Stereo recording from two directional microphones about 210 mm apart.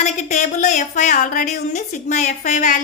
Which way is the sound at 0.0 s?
35° left (ahead or behind).